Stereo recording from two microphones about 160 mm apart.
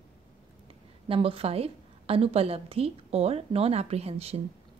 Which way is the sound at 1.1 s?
35° right (ahead or behind).